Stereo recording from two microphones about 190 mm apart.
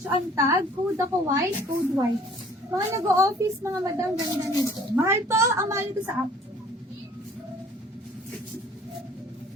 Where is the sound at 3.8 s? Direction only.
20° right (ahead or behind).